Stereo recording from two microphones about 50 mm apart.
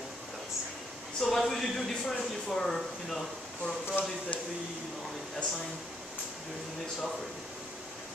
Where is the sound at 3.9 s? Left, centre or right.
Left.